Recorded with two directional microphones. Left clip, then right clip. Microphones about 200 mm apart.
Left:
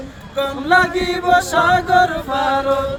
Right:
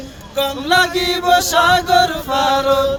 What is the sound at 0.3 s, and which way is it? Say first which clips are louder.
Chant: even; 50° right (ahead or behind).